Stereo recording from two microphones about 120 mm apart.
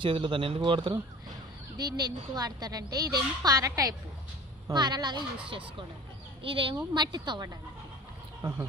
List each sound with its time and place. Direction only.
0.0 s speech: 45° right (ahead or behind)
5.5 s speech: 45° right (ahead or behind); by 8.6 s 25° right (ahead or behind)